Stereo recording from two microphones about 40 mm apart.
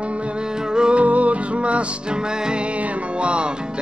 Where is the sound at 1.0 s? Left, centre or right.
Right.